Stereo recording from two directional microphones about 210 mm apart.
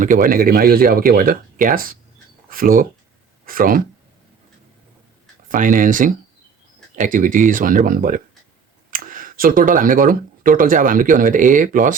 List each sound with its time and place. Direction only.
0.0 s speech: 40° right (ahead or behind)
5.5 s speech: 40° right (ahead or behind)